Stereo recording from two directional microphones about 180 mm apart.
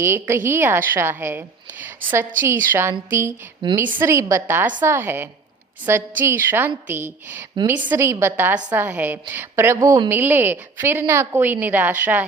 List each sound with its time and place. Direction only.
0.0 s a woman's voice: 15° right (ahead or behind)
3.6 s a woman's voice: 25° right (ahead or behind)
4.0 s a woman's voice: 15° right (ahead or behind)